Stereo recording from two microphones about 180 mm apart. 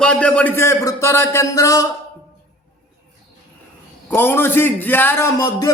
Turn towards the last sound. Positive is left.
turn(degrees=20)  # may be behind; listen again after turning